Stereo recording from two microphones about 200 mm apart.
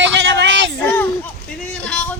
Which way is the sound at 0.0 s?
65° right (ahead or behind).